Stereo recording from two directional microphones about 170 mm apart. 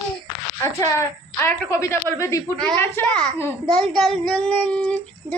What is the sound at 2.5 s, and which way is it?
Child singing, 10° left (ahead or behind).